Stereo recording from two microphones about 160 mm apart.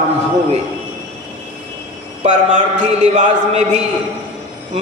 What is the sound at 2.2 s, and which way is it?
A man's voice, 50° right (ahead or behind).